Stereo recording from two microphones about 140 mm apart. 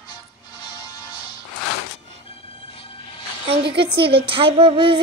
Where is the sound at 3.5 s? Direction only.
40° right (ahead or behind).